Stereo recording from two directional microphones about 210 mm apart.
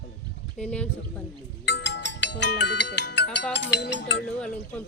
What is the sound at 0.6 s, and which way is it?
Speech, 5° left (ahead or behind).